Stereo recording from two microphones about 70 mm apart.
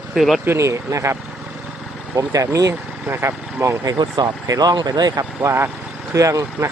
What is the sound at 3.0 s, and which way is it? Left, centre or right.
Speech, right.